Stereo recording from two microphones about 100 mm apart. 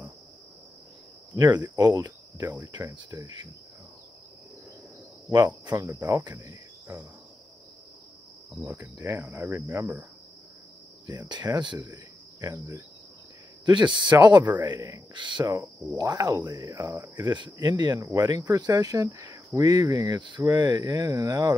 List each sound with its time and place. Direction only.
1.4 s speech: 40° right (ahead or behind)
5.7 s speech: 30° right (ahead or behind)
5.9 s cricket: 25° right (ahead or behind)
8.6 s cricket: 30° right (ahead or behind)
11.1 s cricket: 40° right (ahead or behind)
11.8 s insect: 30° right (ahead or behind)
13.7 s cricket: 50° right (ahead or behind)
14.4 s speech: 20° right (ahead or behind)
15.1 s cricket: 50° right (ahead or behind)
15.4 s speech: 30° right (ahead or behind)
18.0 s speech: 30° right (ahead or behind)
18.5 s speech: 45° right (ahead or behind)
20.2 s speech: 50° right (ahead or behind)